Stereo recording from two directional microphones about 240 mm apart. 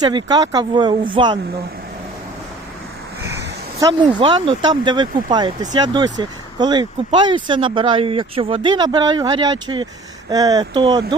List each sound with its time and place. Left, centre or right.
0.0 s speech: centre
3.8 s speech: centre